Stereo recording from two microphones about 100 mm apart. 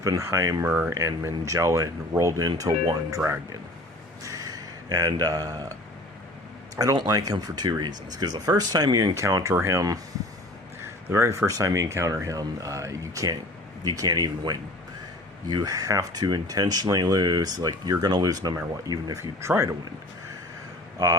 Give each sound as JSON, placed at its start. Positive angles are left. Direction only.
{"t": 0.0, "sound": "speech", "side_deg": -30}
{"t": 4.2, "sound": "a sound", "side_deg": -35}
{"t": 6.7, "sound": "speech", "side_deg": -45}
{"t": 9.1, "sound": "speech", "side_deg": -30}
{"t": 11.1, "sound": "speech", "side_deg": -25}